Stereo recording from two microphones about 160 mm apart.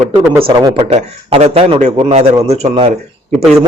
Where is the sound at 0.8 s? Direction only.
40° right (ahead or behind).